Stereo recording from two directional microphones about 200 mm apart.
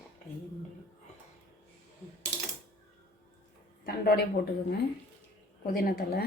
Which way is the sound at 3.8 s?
50° left (ahead or behind).